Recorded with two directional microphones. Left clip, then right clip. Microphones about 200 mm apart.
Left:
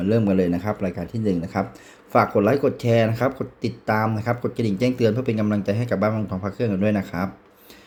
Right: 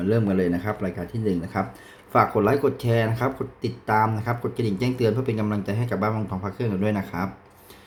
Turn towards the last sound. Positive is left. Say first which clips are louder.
# left 3 dB
turn(degrees=20)  # may be behind; listen again after turning